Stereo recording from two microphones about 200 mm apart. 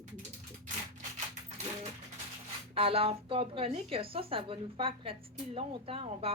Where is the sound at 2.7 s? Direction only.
30° right (ahead or behind).